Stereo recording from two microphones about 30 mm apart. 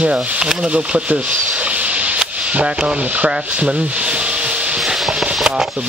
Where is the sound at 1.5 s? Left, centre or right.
Right.